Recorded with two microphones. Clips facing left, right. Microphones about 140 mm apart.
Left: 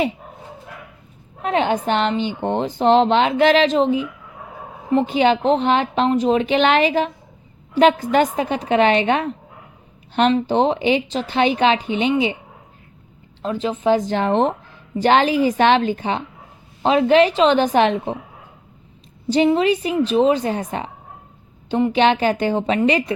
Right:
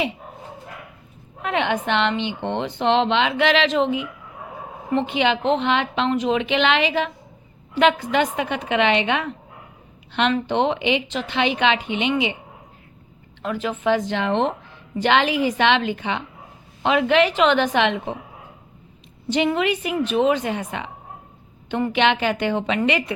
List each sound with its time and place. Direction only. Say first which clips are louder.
1.4 s speech: left 3 dB; 35° left (ahead or behind)
10.4 s speech: left 3 dB; 35° left (ahead or behind)
13.4 s speech: left 3 dB; 30° left (ahead or behind)
19.5 s speech: left 5 dB; 35° left (ahead or behind)
21.7 s a woman's voice: left 5 dB; 20° left (ahead or behind)
21.9 s speech: left 2 dB; 35° left (ahead or behind)